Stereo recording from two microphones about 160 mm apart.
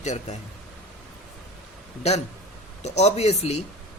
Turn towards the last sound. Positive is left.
turn(degrees=40)  # may be behind; listen again after turning